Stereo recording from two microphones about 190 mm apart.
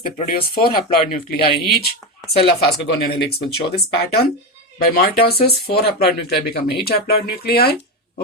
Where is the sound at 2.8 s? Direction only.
55° left (ahead or behind).